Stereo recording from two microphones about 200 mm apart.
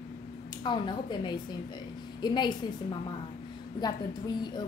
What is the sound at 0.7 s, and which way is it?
A woman's voice, 20° left (ahead or behind).